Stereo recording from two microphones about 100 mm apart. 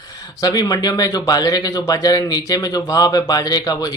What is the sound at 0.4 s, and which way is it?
Speech, 40° left (ahead or behind).